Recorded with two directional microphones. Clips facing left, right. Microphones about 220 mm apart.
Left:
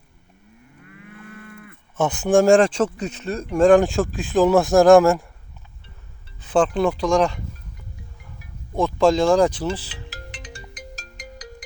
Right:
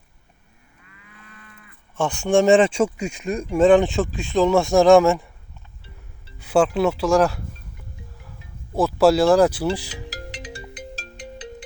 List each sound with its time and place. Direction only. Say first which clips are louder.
0.8 s cattle: left 9 dB; 55° left (ahead or behind)
2.0 s speech: left 1 dB; 5° left (ahead or behind); by 3.4 s 15° right (ahead or behind)
3.5 s speech: left 1 dB; centre (ahead or behind)
6.4 s speech: right 1 dB; 10° right (ahead or behind)
8.7 s speech: right 1 dB; 5° right (ahead or behind)
10.6 s ringtone: right 4 dB; 30° right (ahead or behind)